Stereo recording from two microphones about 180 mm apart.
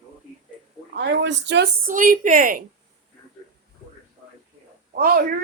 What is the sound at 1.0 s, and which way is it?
Speech, 70° right (ahead or behind).